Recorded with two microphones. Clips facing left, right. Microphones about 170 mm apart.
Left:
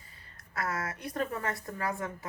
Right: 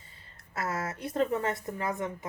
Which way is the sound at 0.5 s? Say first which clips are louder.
Right 2 dB; 25° right (ahead or behind).